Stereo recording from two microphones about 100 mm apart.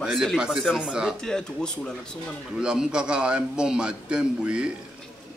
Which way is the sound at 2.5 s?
5° right (ahead or behind).